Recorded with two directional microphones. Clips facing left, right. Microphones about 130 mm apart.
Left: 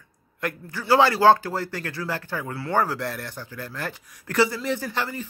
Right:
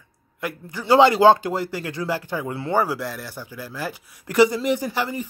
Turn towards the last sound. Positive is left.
turn(degrees=-15)  # may be behind; listen again after turning